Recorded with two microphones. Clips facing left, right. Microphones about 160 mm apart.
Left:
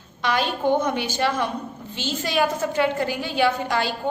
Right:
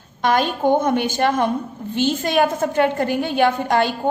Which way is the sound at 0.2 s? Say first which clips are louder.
Right 5 dB; 50° right (ahead or behind).